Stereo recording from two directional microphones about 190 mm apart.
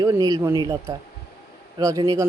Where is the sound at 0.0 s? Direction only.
20° right (ahead or behind).